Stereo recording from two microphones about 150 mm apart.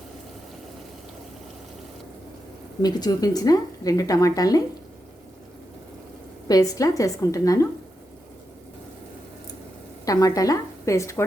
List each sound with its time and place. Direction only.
2.8 s a woman's voice: 25° left (ahead or behind)
6.5 s a woman's voice: 25° left (ahead or behind)
10.1 s a woman's voice: 25° left (ahead or behind)